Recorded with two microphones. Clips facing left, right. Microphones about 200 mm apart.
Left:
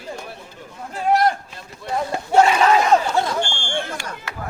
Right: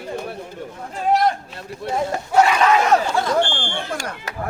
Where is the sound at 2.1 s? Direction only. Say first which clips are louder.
Left 2 dB; 25° left (ahead or behind).